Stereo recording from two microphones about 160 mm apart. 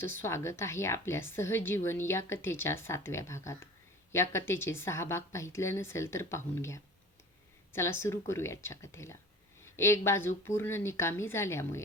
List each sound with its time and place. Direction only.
0.0 s a woman's voice: 15° left (ahead or behind)